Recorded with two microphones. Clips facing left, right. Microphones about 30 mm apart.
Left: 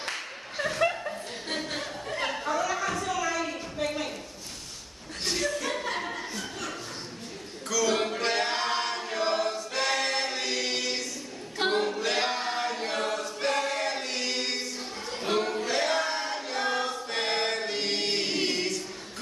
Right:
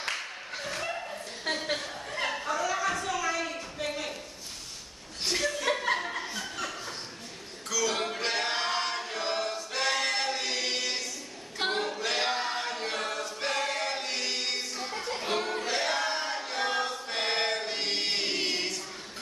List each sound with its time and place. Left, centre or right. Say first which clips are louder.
0.6 s dog: left 8 dB; left
2.1 s chatter: left 2 dB; centre
3.7 s a sound: left 5 dB; centre
7.7 s choir: left 3 dB; centre
11.5 s a capella: left 4 dB; centre
15.2 s music: left 5 dB; centre
15.5 s choir: left 2 dB; centre